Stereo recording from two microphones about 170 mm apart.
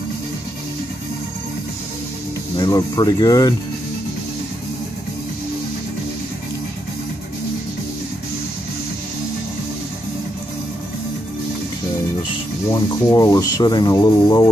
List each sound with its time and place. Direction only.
2.5 s speech: 25° left (ahead or behind)
12.7 s speech: 20° left (ahead or behind)